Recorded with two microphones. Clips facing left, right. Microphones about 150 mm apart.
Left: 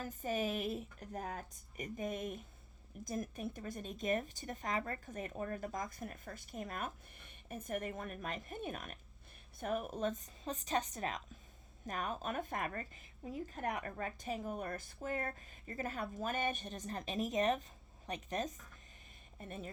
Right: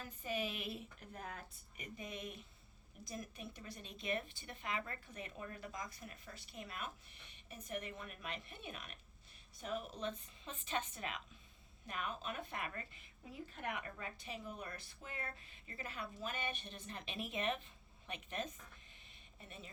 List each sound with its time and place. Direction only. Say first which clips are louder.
0.0 s speech: left 5 dB; 45° left (ahead or behind)